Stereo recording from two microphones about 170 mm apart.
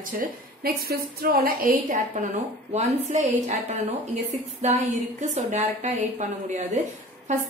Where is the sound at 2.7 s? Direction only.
40° right (ahead or behind).